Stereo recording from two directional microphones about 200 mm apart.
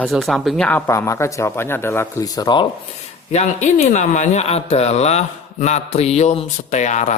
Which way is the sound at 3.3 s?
35° left (ahead or behind).